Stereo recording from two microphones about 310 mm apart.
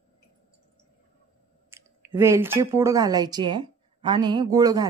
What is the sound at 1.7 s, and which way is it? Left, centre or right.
Speech, centre.